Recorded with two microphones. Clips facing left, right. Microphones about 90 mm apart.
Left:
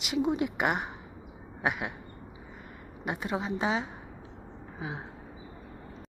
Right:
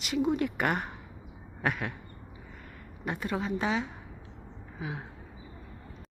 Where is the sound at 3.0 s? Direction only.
20° left (ahead or behind).